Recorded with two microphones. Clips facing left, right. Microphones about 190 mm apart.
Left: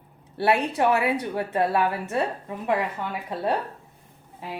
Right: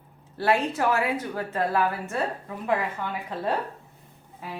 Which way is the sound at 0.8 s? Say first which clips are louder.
Left 3 dB; 20° left (ahead or behind).